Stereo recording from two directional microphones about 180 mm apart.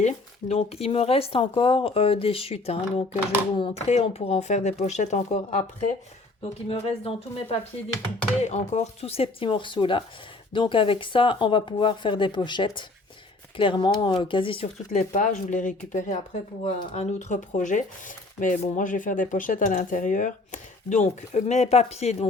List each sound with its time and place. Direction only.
0.0 s speech: 35° left (ahead or behind)
6.7 s speech: 30° left (ahead or behind)
15.1 s speech: 45° left (ahead or behind)